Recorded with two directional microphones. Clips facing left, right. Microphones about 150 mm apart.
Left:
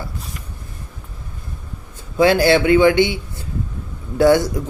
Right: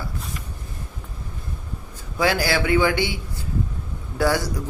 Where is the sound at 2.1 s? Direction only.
25° left (ahead or behind).